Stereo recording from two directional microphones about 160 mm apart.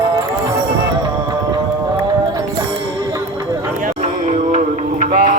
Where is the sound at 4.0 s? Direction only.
50° right (ahead or behind).